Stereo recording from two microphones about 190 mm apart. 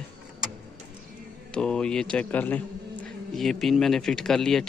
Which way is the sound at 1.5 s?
5° left (ahead or behind).